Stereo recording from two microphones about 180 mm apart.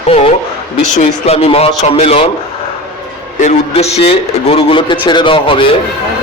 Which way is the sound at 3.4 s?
40° left (ahead or behind).